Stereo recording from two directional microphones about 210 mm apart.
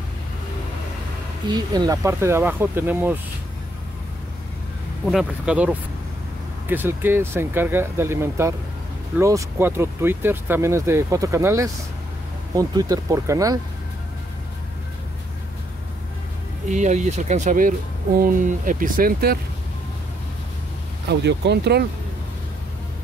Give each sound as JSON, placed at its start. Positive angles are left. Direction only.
{"t": 1.5, "sound": "speech", "side_deg": -20}
{"t": 5.0, "sound": "speech", "side_deg": 0}
{"t": 16.6, "sound": "speech", "side_deg": -35}
{"t": 21.1, "sound": "speech", "side_deg": -55}